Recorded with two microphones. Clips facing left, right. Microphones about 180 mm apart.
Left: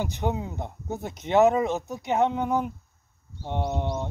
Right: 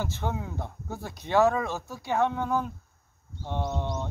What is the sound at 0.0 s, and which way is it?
Speech, 15° left (ahead or behind).